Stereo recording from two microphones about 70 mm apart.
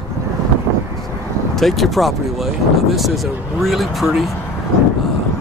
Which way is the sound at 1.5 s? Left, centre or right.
Centre.